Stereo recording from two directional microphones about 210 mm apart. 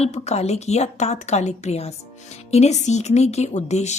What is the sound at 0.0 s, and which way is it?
A woman's voice, 30° left (ahead or behind).